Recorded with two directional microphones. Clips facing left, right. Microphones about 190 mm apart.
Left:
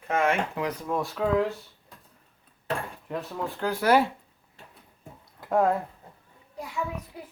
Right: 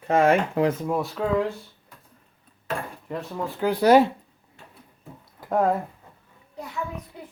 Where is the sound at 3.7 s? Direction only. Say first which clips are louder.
Right 6 dB; 20° right (ahead or behind).